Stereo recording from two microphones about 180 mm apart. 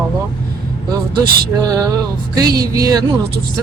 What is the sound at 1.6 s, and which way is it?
Speech, 20° right (ahead or behind).